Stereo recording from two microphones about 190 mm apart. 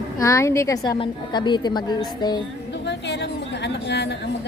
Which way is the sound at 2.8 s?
65° left (ahead or behind).